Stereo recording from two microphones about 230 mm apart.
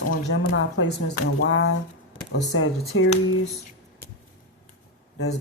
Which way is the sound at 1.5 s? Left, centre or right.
Left.